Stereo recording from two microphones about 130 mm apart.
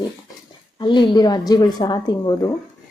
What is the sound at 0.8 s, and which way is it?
A woman's voice, 35° left (ahead or behind).